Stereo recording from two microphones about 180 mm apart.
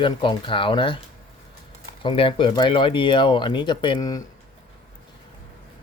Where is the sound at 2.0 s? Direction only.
30° left (ahead or behind).